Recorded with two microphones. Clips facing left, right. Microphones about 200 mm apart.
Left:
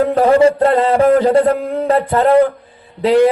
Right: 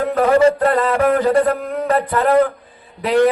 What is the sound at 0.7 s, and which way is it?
A man's voice, 30° left (ahead or behind).